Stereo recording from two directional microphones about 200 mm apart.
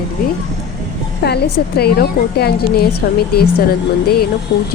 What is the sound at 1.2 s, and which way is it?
A woman's voice, 55° left (ahead or behind).